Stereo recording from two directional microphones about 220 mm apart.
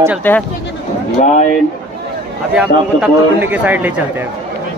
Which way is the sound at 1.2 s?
30° left (ahead or behind).